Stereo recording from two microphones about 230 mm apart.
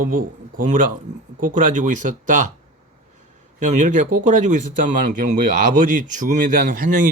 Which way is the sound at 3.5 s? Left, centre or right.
Right.